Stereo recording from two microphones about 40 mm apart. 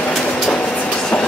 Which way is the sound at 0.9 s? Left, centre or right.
Centre.